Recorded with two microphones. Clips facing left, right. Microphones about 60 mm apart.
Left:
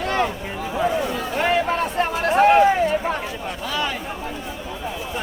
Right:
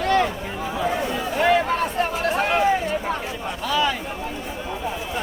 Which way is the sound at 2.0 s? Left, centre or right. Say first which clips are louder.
Left 4 dB; left.